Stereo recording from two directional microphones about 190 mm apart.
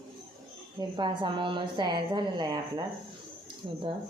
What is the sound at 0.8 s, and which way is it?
A woman's voice, 25° right (ahead or behind).